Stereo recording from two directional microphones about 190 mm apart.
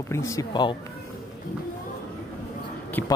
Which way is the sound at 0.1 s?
15° left (ahead or behind).